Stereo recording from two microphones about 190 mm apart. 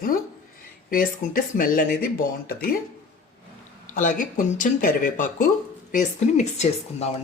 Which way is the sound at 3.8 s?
40° left (ahead or behind).